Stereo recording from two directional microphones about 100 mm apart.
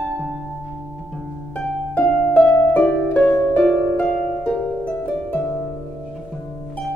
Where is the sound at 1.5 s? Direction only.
15° left (ahead or behind).